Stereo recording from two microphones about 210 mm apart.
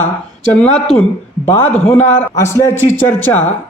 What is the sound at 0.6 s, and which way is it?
Speech, 5° left (ahead or behind).